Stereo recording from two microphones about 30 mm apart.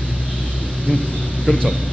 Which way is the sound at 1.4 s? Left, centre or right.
Left.